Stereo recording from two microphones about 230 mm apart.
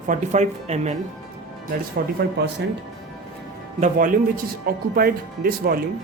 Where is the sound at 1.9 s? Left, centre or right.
Right.